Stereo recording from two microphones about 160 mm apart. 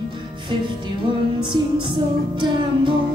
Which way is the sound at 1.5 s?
30° right (ahead or behind).